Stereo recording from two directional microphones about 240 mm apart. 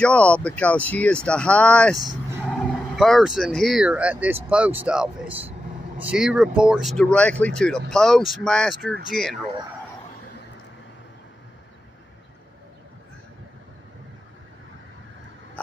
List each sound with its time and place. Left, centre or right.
0.0 s speech: centre
2.0 s vehicle: centre
3.0 s speech: centre